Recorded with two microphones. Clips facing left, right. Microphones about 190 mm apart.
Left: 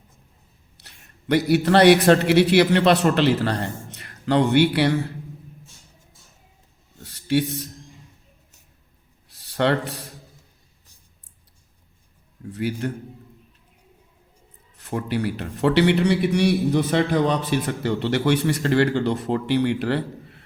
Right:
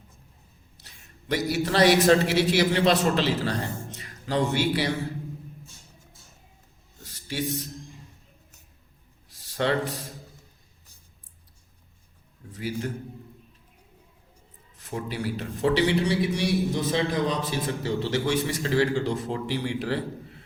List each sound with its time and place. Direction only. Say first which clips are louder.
0.8 s a man's voice: left 1 dB; 65° left (ahead or behind)
7.0 s a sound: left 11 dB; 65° left (ahead or behind)
9.4 s a man's voice: left 4 dB; 65° left (ahead or behind)
12.5 s a man's voice: left 5 dB; 65° left (ahead or behind)
14.8 s a man's voice: left 6 dB; 65° left (ahead or behind)